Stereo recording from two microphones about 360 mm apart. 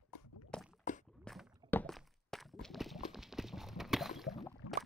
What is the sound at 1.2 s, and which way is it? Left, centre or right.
Walk, centre.